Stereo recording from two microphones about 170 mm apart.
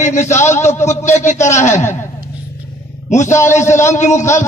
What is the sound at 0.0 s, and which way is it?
Speech, 45° left (ahead or behind).